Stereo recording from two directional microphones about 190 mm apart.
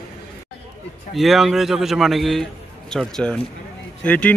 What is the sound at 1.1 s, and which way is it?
A man's voice, centre (ahead or behind).